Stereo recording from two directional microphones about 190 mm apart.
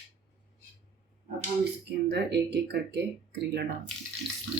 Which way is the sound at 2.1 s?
60° right (ahead or behind).